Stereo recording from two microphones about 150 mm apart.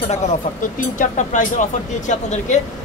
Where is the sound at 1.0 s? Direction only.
55° left (ahead or behind).